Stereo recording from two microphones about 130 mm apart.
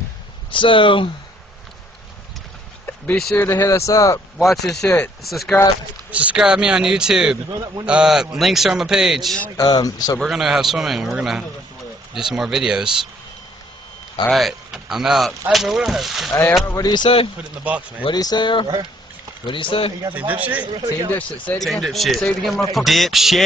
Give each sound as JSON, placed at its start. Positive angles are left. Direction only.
{"t": 0.5, "sound": "speech", "side_deg": 40}
{"t": 3.3, "sound": "speech", "side_deg": 20}
{"t": 4.4, "sound": "speech", "side_deg": 0}
{"t": 9.6, "sound": "speech", "side_deg": 30}
{"t": 10.2, "sound": "speech", "side_deg": -5}
{"t": 14.3, "sound": "speech", "side_deg": 0}
{"t": 16.3, "sound": "speech", "side_deg": 15}
{"t": 16.6, "sound": "speech", "side_deg": 25}
{"t": 17.6, "sound": "speech", "side_deg": -10}
{"t": 18.0, "sound": "speech", "side_deg": 30}
{"t": 20.2, "sound": "speech", "side_deg": -10}
{"t": 20.6, "sound": "speech", "side_deg": -35}
{"t": 21.2, "sound": "speech", "side_deg": 10}